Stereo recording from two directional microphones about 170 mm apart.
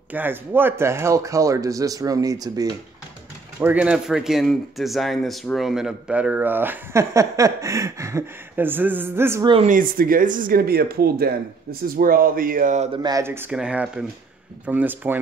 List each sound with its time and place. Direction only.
0.1 s speech: 10° right (ahead or behind)
3.5 s speech: 10° right (ahead or behind)
9.4 s speech: 30° right (ahead or behind)
9.7 s speech: 55° right (ahead or behind)
13.0 s speech: 20° right (ahead or behind)